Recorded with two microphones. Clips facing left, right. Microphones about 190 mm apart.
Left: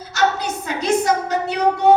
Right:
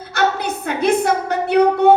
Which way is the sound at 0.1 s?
60° right (ahead or behind).